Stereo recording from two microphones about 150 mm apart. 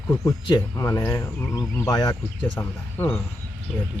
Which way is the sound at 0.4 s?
25° left (ahead or behind).